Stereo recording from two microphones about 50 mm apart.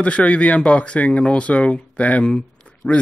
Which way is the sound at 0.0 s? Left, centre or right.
Left.